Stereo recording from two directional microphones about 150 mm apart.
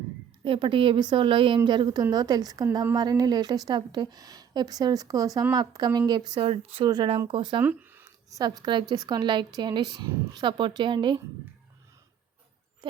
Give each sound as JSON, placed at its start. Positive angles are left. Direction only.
{"t": 0.4, "sound": "a woman's voice", "side_deg": -35}
{"t": 7.6, "sound": "a woman's voice", "side_deg": -10}
{"t": 12.8, "sound": "a sound", "side_deg": -30}